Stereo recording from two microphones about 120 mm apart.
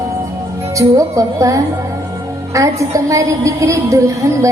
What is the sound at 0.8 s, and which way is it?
A woman's voice, 25° right (ahead or behind).